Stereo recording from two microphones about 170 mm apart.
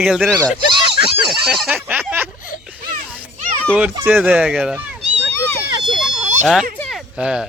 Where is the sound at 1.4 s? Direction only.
5° right (ahead or behind).